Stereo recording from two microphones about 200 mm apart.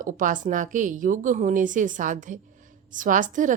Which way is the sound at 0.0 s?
40° right (ahead or behind).